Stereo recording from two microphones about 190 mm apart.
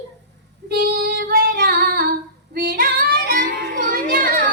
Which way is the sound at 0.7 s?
55° right (ahead or behind).